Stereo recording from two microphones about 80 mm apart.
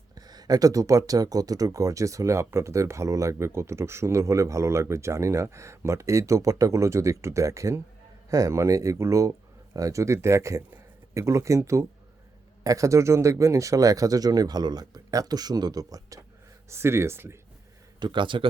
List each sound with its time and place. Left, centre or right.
0.2 s speech: right
16.6 s speech: right
18.0 s speech: right